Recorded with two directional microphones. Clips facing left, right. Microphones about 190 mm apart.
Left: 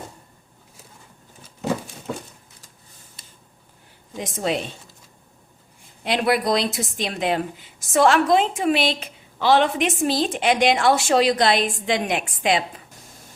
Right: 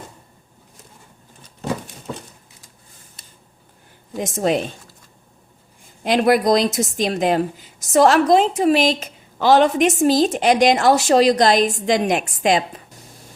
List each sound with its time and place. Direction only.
4.2 s a woman's voice: 45° right (ahead or behind)
6.0 s a woman's voice: 45° right (ahead or behind)